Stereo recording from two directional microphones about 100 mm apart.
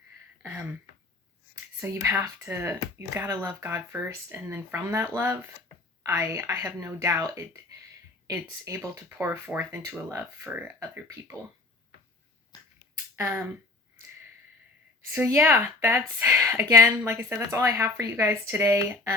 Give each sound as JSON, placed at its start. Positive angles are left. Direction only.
{"t": 0.4, "sound": "a sound", "side_deg": -20}
{"t": 1.8, "sound": "speech", "side_deg": -25}
{"t": 13.1, "sound": "speech", "side_deg": -25}
{"t": 15.1, "sound": "speech", "side_deg": -20}